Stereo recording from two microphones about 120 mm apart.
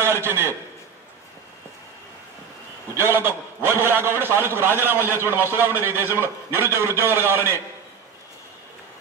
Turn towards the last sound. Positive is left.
turn(degrees=-20)  # may be behind; listen again after turning